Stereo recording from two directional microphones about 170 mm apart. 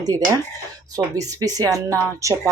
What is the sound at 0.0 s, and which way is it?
Speech, 20° right (ahead or behind).